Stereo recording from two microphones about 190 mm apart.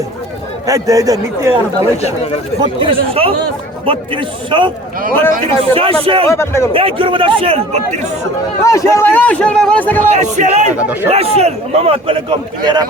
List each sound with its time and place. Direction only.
0.7 s a man's voice: 20° right (ahead or behind)
2.0 s speech: 35° left (ahead or behind)
2.6 s speech: 30° right (ahead or behind)
5.7 s speech: 30° right (ahead or behind)
6.2 s a man's voice: 15° left (ahead or behind)
6.7 s speech: 30° right (ahead or behind)
8.6 s a man's voice: 15° left (ahead or behind)
10.1 s a man's voice: 40° right (ahead or behind)
10.8 s a man's voice: 10° right (ahead or behind)
11.1 s a man's voice: 35° right (ahead or behind)